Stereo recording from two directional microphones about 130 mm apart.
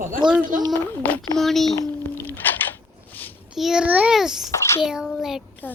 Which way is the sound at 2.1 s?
15° left (ahead or behind).